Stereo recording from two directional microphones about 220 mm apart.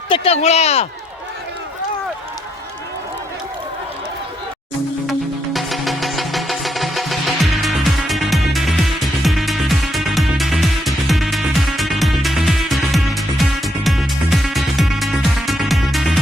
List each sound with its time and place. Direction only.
0.1 s speech: 30° left (ahead or behind)
5.5 s music: centre (ahead or behind)